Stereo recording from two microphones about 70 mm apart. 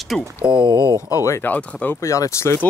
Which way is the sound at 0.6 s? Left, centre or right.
Right.